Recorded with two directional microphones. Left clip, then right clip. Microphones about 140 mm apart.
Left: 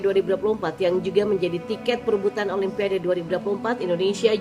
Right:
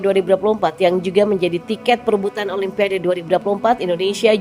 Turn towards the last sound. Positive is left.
turn(degrees=-45)  # may be behind; listen again after turning